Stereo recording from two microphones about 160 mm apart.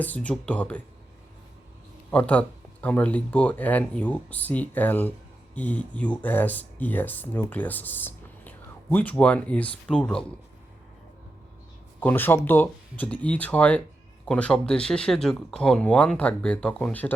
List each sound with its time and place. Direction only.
0.0 s speech: 10° left (ahead or behind)
2.0 s speech: 10° left (ahead or behind)
11.9 s speech: 10° left (ahead or behind)